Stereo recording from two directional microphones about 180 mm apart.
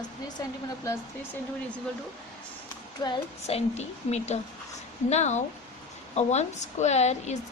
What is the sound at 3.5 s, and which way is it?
Speech, 35° left (ahead or behind).